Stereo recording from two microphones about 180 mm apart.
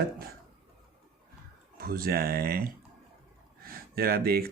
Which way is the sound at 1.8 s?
55° right (ahead or behind).